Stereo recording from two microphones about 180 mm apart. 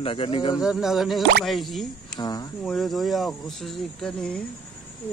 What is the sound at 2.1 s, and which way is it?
Speech, 20° left (ahead or behind).